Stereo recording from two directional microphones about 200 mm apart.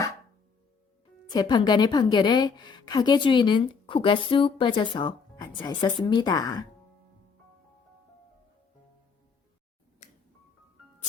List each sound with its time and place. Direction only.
1.3 s a woman's voice: 20° left (ahead or behind)
10.0 s music: 35° left (ahead or behind)